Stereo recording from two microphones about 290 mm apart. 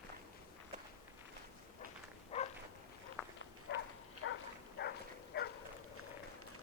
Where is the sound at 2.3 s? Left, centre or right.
Left.